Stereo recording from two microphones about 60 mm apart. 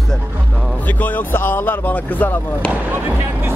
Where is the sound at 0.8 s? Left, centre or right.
Left.